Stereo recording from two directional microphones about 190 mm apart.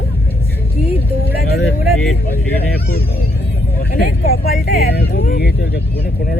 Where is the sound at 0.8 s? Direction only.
30° left (ahead or behind).